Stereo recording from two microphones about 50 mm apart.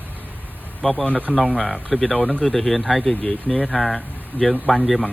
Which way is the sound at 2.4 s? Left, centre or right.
Centre.